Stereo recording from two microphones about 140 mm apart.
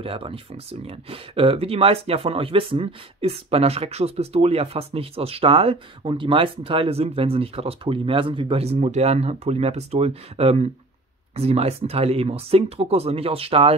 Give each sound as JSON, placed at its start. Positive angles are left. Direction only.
{"t": 0.0, "sound": "speech", "side_deg": -40}